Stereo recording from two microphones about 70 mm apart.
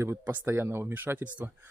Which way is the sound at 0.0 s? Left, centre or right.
Right.